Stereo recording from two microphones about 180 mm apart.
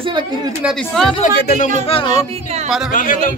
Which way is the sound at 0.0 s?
25° right (ahead or behind).